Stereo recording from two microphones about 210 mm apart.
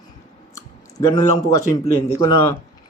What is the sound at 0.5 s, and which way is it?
Clicking, 15° left (ahead or behind).